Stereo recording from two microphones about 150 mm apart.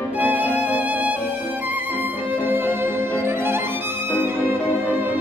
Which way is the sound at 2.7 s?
15° right (ahead or behind).